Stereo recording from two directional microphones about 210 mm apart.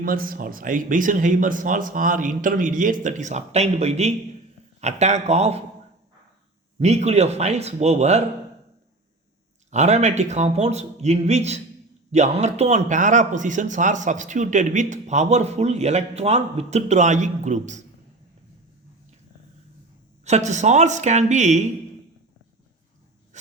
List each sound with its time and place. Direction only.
0.0 s speech: 45° right (ahead or behind)
6.7 s speech: 30° right (ahead or behind)
9.6 s speech: 35° right (ahead or behind)
20.2 s speech: 35° right (ahead or behind)
23.3 s a sound: 35° right (ahead or behind)